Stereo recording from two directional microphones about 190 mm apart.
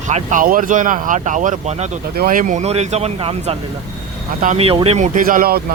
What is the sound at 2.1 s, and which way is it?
Speech, 50° right (ahead or behind).